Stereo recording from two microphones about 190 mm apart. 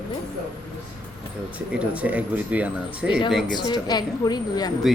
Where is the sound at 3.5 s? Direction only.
20° left (ahead or behind).